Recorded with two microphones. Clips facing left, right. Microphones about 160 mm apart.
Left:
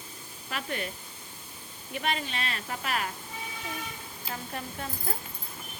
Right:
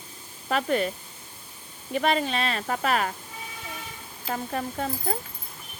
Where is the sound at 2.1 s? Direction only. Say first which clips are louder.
Right 7 dB; 35° right (ahead or behind).